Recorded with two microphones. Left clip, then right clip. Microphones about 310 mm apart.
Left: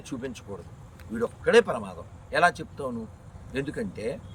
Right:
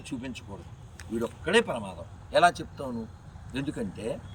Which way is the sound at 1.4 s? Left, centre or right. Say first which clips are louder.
Left 5 dB; centre.